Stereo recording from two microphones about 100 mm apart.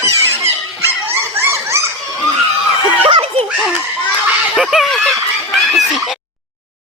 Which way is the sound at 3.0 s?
60° right (ahead or behind).